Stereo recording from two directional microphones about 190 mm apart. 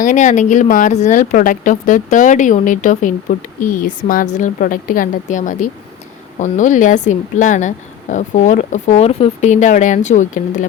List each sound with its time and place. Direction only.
0.0 s speech: 40° left (ahead or behind)